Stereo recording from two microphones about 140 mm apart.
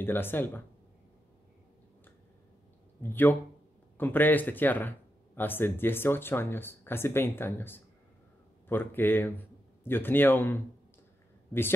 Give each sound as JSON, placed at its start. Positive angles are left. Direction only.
{"t": 0.0, "sound": "speech", "side_deg": 15}
{"t": 3.0, "sound": "speech", "side_deg": 15}